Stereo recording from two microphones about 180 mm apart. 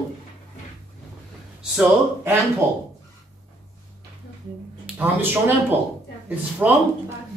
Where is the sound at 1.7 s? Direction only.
10° right (ahead or behind).